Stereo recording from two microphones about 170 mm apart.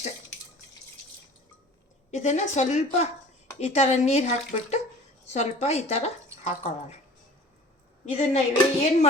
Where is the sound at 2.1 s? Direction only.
45° left (ahead or behind).